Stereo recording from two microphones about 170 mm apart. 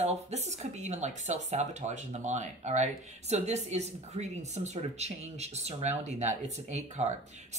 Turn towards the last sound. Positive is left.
turn(degrees=-40)  # may be behind; listen again after turning